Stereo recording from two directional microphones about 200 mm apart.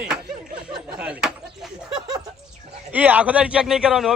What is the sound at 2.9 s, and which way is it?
Speech, 10° right (ahead or behind).